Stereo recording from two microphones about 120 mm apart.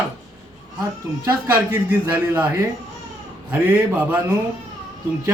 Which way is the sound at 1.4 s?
20° right (ahead or behind).